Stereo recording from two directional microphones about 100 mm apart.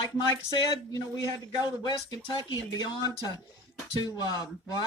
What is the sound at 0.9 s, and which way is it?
Speech, 40° left (ahead or behind).